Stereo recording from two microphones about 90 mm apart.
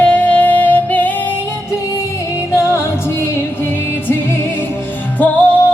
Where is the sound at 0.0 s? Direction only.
15° left (ahead or behind).